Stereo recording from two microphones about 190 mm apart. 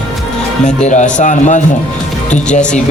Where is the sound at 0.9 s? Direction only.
40° left (ahead or behind).